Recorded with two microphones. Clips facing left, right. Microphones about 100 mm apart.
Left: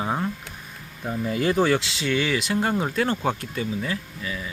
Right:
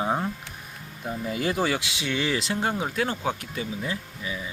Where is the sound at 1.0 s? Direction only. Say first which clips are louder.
Left 4 dB; 5° right (ahead or behind).